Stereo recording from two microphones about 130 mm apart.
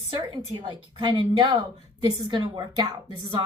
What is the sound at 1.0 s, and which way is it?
Speech, 40° right (ahead or behind).